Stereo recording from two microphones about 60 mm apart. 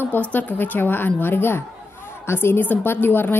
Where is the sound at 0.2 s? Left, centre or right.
Left.